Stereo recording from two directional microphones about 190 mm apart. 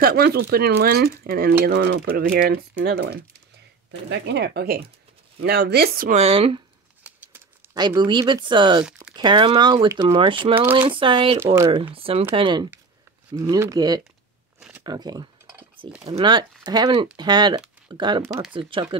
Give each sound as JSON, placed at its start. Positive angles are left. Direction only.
{"t": 0.0, "sound": "speech", "side_deg": -55}
{"t": 6.1, "sound": "speech", "side_deg": -30}
{"t": 7.7, "sound": "speech", "side_deg": -20}